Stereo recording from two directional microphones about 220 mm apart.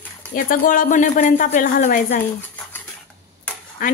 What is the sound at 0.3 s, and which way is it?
Speech, 40° left (ahead or behind).